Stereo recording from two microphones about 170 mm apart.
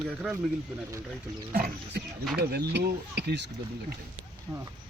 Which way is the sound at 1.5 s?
65° right (ahead or behind).